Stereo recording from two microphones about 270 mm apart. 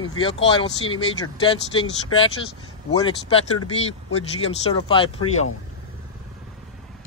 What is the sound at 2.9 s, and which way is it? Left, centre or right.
Speech, centre.